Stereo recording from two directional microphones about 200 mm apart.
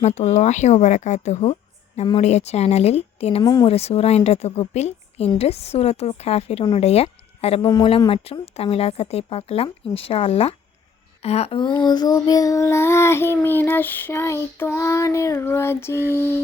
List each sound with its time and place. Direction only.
0.0 s a woman's voice: 35° left (ahead or behind)
3.4 s a woman's voice: 20° left (ahead or behind)
11.7 s child singing: 20° left (ahead or behind)